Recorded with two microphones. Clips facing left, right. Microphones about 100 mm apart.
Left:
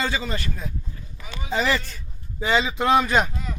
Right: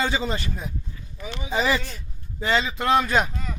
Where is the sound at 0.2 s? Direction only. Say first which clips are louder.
Right 2 dB; 20° right (ahead or behind).